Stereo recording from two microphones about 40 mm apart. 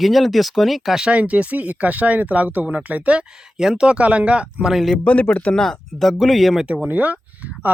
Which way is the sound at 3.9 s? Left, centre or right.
Right.